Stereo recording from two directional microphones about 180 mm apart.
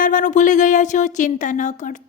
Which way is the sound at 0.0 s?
45° left (ahead or behind).